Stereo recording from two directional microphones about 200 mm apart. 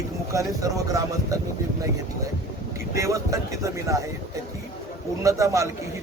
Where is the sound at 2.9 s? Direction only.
15° right (ahead or behind).